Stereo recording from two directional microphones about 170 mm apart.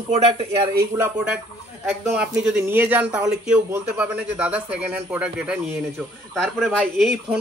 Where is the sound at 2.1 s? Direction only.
5° right (ahead or behind).